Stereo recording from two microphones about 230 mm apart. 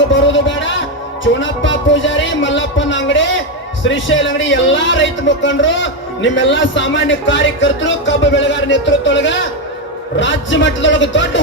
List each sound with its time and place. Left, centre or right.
0.1 s a man's voice: left